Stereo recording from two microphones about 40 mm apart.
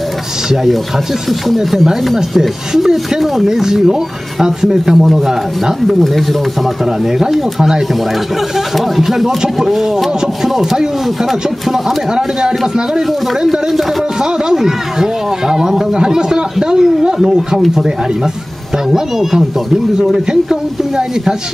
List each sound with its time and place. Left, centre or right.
1.5 s speech: centre
5.9 s speech: centre
8.7 s speech: centre
13.5 s speech: centre
20.0 s speech: centre